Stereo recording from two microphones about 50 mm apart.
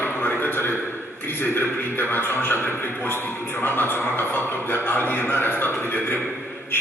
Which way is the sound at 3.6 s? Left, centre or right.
Left.